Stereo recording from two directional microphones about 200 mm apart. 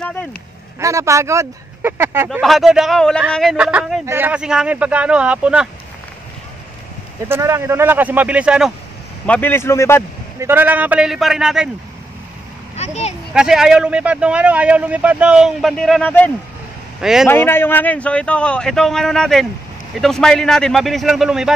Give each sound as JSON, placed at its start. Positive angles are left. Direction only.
{"t": 0.0, "sound": "a sound", "side_deg": 5}
{"t": 0.7, "sound": "speech", "side_deg": -15}
{"t": 2.2, "sound": "a man's voice", "side_deg": 0}
{"t": 7.2, "sound": "speech", "side_deg": -15}
{"t": 9.2, "sound": "a man's voice", "side_deg": 10}
{"t": 10.4, "sound": "a man's voice", "side_deg": -10}
{"t": 12.7, "sound": "a sound", "side_deg": 35}
{"t": 13.3, "sound": "a man's voice", "side_deg": -5}
{"t": 17.3, "sound": "a man's voice", "side_deg": 10}